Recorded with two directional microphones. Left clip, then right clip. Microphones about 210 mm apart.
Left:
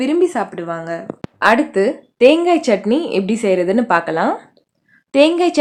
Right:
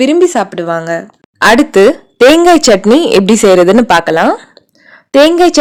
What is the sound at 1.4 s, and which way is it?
Speech, 50° right (ahead or behind).